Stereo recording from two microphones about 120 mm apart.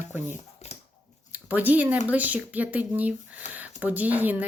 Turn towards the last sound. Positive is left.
turn(degrees=-15)  # may be behind; listen again after turning